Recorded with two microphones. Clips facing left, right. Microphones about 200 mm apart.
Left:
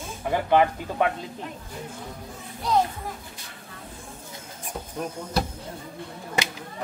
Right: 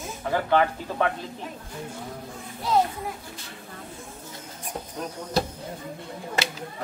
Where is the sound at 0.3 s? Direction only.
15° left (ahead or behind).